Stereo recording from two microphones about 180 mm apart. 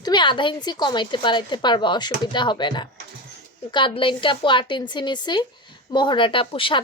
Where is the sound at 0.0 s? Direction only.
25° left (ahead or behind).